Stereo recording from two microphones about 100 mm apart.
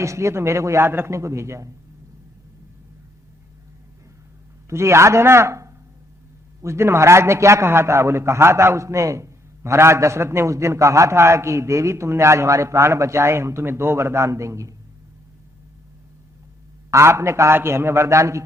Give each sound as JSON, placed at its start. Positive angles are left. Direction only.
{"t": 0.0, "sound": "a man's voice", "side_deg": -30}
{"t": 4.7, "sound": "a man's voice", "side_deg": -30}
{"t": 16.9, "sound": "a man's voice", "side_deg": -30}